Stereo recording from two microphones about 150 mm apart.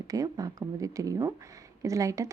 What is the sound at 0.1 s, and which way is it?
Speech, 25° right (ahead or behind).